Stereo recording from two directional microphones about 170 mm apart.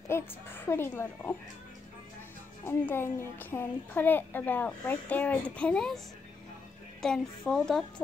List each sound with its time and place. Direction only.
0.1 s a woman's voice: 15° left (ahead or behind)
2.6 s a woman's voice: 15° left (ahead or behind)
7.0 s a woman's voice: 5° left (ahead or behind)